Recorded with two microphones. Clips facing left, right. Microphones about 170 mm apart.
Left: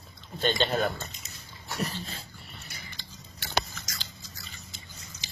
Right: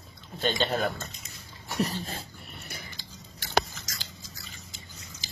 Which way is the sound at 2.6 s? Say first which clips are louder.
Right 4 dB; 50° right (ahead or behind).